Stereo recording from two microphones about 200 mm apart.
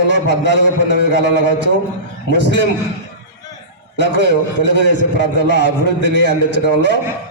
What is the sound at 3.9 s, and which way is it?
A man's voice, 60° left (ahead or behind).